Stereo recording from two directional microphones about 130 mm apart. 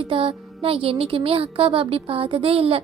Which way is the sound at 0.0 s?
45° right (ahead or behind).